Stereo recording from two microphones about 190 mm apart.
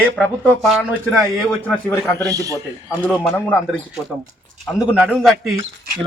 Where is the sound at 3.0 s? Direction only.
10° left (ahead or behind).